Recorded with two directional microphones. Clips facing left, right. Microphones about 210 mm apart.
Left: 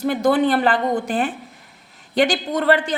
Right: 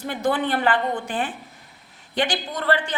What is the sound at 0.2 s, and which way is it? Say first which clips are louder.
A woman's voice: left 4 dB; 40° left (ahead or behind).